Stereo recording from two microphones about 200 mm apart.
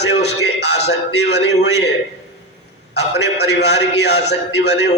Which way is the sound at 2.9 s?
60° left (ahead or behind).